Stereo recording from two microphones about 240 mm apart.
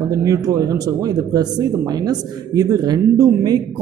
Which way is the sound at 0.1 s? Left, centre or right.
Centre.